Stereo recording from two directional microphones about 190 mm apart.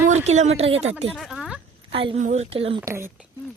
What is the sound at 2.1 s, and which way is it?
Speech, 40° right (ahead or behind).